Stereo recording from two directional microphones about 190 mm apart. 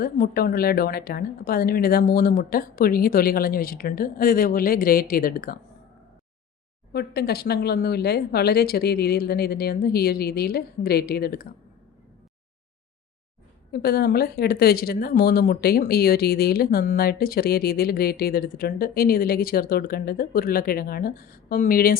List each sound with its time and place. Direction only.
0.0 s speech: 50° left (ahead or behind)
6.9 s speech: 55° left (ahead or behind)
13.7 s speech: 55° left (ahead or behind)